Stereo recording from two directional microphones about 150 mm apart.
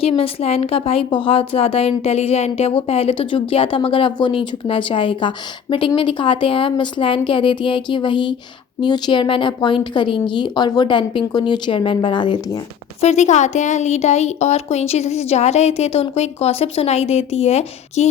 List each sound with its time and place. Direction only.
0.0 s speech: 40° left (ahead or behind)
13.0 s speech: 50° left (ahead or behind)